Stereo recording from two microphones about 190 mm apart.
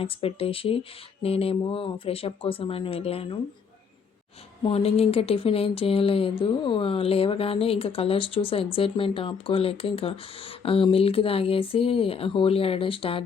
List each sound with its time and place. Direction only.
0.0 s speech: 30° left (ahead or behind)
4.6 s speech: 30° left (ahead or behind)